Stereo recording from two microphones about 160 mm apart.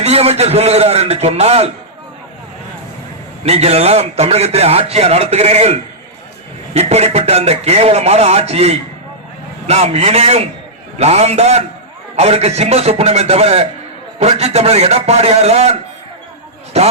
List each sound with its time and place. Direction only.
0.0 s a man's voice: 40° right (ahead or behind)
3.4 s a man's voice: 40° right (ahead or behind)